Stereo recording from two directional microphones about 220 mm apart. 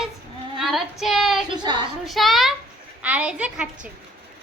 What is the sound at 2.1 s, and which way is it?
A child's voice, centre (ahead or behind).